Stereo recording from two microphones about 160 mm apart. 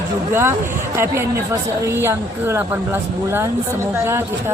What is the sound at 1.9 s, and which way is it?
Mantra, 15° right (ahead or behind).